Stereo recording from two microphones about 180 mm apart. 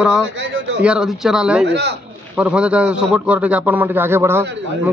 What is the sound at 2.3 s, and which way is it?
A man's voice, 5° right (ahead or behind).